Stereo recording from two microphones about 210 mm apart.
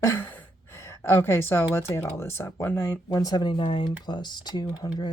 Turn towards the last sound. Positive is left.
turn(degrees=20)  # may be behind; listen again after turning